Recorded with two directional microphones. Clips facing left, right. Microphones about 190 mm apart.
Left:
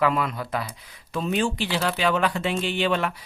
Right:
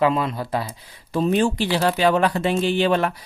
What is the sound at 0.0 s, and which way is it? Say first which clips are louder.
Speech: right 3 dB; 25° right (ahead or behind).